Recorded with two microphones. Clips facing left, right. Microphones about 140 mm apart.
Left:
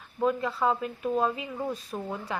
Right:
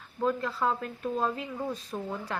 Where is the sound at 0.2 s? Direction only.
5° left (ahead or behind).